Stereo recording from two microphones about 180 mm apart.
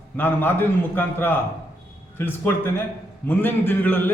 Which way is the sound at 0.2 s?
10° left (ahead or behind).